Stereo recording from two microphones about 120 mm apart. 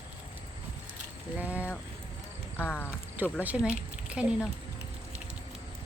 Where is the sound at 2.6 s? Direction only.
20° left (ahead or behind).